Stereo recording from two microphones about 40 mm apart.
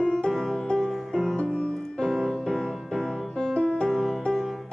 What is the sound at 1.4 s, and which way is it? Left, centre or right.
Music, left.